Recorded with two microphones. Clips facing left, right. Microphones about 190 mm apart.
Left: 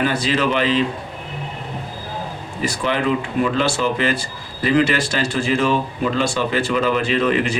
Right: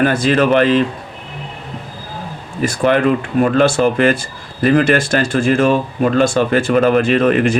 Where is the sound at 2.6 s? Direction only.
50° right (ahead or behind).